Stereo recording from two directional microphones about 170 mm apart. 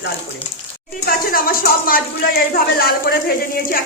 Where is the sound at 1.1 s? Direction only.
60° left (ahead or behind).